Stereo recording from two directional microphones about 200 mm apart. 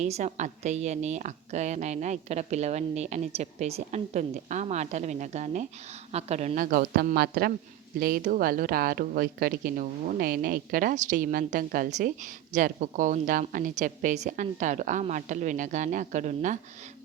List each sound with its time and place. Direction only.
0.0 s a woman's voice: 35° right (ahead or behind)